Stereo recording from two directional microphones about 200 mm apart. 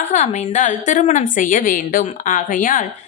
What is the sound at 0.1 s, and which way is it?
A woman's voice, 35° left (ahead or behind).